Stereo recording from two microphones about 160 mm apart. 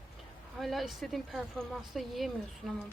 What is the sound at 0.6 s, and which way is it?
Speech, centre (ahead or behind).